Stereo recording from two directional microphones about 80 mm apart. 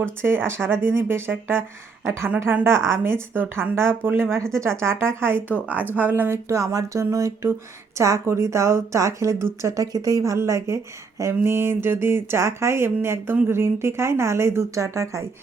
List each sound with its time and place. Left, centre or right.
0.0 s a woman's voice: right
5.6 s a woman's voice: right